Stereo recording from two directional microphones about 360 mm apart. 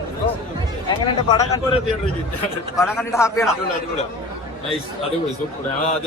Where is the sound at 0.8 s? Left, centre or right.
Centre.